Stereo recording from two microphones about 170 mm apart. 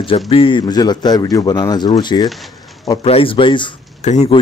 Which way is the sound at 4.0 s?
40° left (ahead or behind).